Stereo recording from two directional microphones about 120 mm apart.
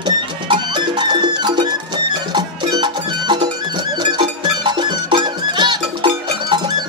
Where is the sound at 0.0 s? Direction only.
40° right (ahead or behind).